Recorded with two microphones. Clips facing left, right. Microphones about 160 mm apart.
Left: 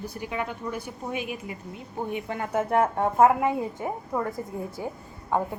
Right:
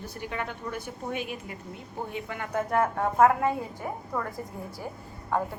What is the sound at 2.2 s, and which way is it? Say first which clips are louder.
A woman's voice: left 3 dB; 30° left (ahead or behind).